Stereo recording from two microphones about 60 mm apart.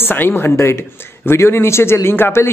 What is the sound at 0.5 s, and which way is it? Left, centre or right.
A man's voice, left.